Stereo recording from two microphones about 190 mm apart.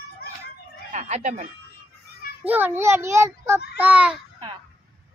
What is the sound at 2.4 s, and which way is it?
A child's voice, 10° right (ahead or behind).